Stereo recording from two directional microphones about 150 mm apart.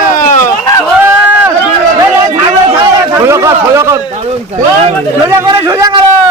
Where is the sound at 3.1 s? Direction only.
20° right (ahead or behind).